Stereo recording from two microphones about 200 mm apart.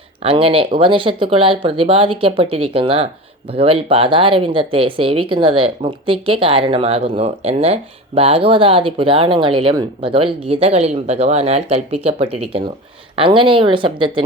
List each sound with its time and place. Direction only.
0.2 s speech: 30° right (ahead or behind)